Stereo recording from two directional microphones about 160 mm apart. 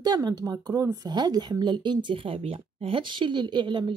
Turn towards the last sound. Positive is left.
turn(degrees=-30)  # may be behind; listen again after turning